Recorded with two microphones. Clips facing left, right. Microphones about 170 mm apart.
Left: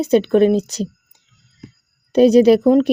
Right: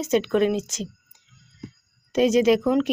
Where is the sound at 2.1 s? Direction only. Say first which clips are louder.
Left 8 dB; 35° left (ahead or behind).